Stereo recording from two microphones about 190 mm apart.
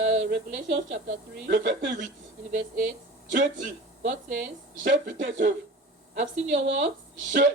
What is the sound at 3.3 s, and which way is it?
Speech, 45° right (ahead or behind).